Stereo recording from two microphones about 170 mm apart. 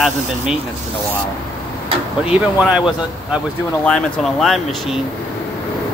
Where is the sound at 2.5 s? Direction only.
5° right (ahead or behind).